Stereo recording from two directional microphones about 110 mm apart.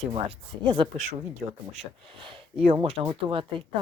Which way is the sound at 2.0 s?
50° right (ahead or behind).